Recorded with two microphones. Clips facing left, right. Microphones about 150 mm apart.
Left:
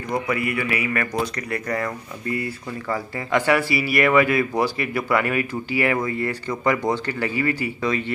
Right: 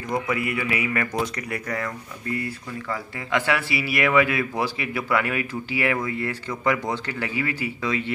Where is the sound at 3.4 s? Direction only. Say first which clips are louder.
Left 5 dB; centre (ahead or behind).